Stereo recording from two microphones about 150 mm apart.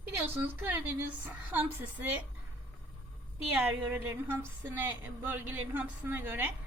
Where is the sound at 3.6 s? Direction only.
15° right (ahead or behind).